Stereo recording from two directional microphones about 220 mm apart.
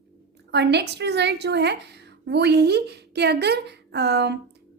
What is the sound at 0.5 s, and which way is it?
A woman's voice, 50° right (ahead or behind).